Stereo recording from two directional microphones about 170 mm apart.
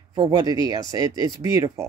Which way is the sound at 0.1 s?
25° right (ahead or behind).